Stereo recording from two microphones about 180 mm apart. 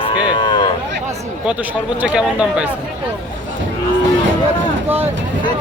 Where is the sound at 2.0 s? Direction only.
5° right (ahead or behind).